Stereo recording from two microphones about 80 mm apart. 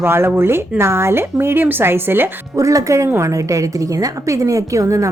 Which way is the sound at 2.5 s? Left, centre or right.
Right.